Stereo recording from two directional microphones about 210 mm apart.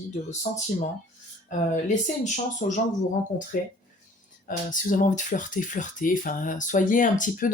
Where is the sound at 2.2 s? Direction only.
35° left (ahead or behind).